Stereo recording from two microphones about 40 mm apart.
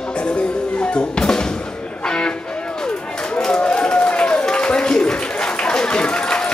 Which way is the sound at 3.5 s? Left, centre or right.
Left.